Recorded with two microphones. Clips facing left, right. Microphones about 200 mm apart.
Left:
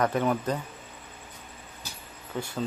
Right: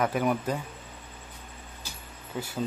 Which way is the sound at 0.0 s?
10° right (ahead or behind).